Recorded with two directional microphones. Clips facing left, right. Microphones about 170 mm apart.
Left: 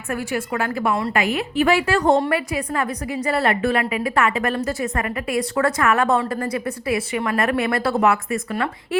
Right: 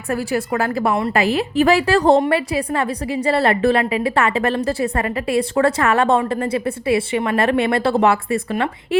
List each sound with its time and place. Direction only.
0.1 s a woman's voice: 35° right (ahead or behind)